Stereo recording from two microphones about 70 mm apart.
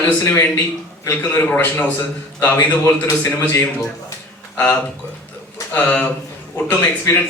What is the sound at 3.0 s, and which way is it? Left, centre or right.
Speech, left.